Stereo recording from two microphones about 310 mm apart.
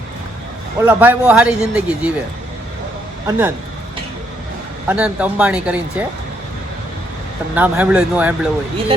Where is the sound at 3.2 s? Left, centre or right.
Centre.